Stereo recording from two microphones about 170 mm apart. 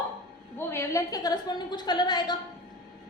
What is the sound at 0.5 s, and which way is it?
A woman's voice, 15° left (ahead or behind).